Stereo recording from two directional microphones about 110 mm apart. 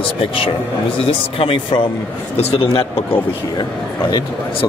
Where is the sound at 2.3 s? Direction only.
75° left (ahead or behind).